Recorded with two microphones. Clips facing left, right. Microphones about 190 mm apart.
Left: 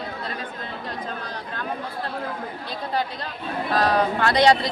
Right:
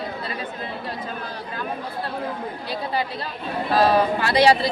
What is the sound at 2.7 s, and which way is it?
A woman's voice, 5° right (ahead or behind).